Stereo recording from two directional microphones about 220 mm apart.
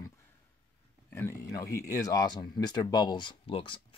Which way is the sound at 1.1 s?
10° left (ahead or behind).